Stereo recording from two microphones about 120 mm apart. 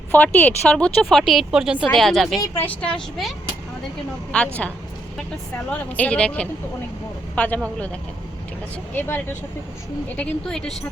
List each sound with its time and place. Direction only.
0.1 s speech: 15° left (ahead or behind)
4.3 s speech: 10° left (ahead or behind)
5.7 s speech: 10° left (ahead or behind)
9.0 s speech: 15° left (ahead or behind)
10.2 s speech: 5° left (ahead or behind)